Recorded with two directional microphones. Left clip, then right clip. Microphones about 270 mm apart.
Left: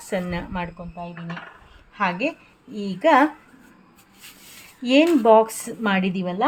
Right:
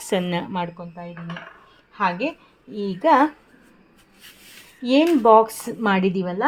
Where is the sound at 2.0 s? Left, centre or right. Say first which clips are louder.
Right 1 dB; centre.